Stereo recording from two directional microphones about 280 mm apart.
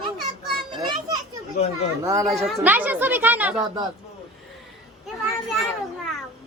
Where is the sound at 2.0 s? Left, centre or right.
Centre.